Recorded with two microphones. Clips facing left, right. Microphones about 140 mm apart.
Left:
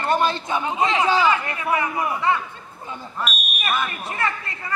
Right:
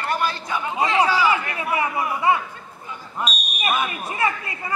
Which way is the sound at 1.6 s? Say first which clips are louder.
Even; 20° right (ahead or behind).